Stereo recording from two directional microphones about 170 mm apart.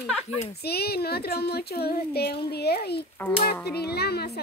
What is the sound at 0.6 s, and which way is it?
Speech, 70° left (ahead or behind).